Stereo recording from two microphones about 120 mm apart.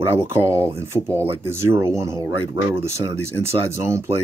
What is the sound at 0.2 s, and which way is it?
Speech, 20° right (ahead or behind).